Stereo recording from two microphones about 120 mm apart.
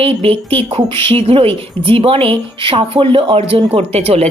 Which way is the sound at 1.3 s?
50° right (ahead or behind).